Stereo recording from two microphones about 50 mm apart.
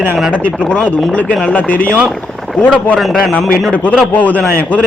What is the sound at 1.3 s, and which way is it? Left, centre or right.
Speech, left.